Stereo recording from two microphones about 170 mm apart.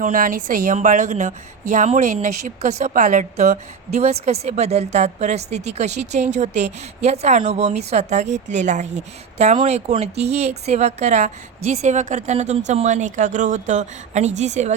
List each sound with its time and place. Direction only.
0.0 s a woman's voice: 50° right (ahead or behind)